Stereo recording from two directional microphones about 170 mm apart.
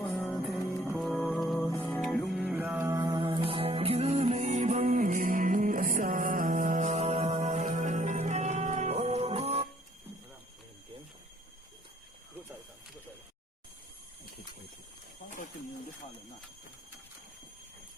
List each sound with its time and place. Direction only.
0.0 s music: 10° left (ahead or behind); by 9.6 s 35° right (ahead or behind)